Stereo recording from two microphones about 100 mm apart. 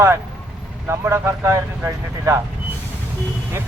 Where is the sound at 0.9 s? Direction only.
25° right (ahead or behind).